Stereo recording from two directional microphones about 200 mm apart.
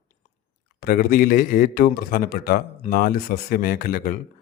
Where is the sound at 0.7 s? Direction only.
45° left (ahead or behind).